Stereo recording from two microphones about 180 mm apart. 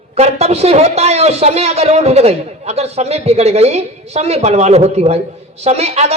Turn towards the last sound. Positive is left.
turn(degrees=-35)  # may be behind; listen again after turning